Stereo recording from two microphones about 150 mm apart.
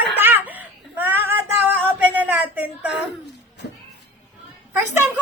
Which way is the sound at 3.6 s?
85° left.